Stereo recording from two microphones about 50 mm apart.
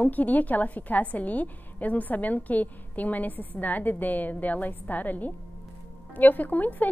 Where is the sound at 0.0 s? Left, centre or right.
Left.